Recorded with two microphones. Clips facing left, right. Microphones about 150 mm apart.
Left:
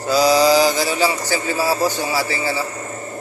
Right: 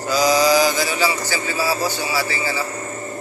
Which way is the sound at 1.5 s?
40° left (ahead or behind).